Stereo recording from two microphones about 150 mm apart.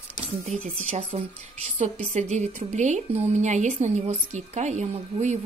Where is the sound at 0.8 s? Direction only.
45° right (ahead or behind).